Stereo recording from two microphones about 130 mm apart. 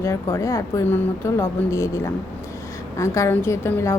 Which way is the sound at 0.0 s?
20° left (ahead or behind).